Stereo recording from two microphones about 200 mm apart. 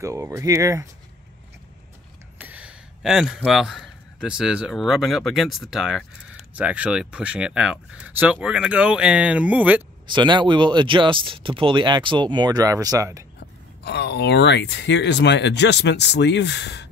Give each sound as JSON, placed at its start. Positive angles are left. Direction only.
{"t": 0.0, "sound": "speech", "side_deg": -15}
{"t": 2.3, "sound": "a man's voice", "side_deg": -10}
{"t": 10.0, "sound": "speech", "side_deg": -25}
{"t": 13.8, "sound": "speech", "side_deg": 55}